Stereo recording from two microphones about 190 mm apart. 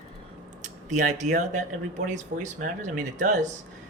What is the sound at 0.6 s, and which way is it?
Speech, 40° right (ahead or behind).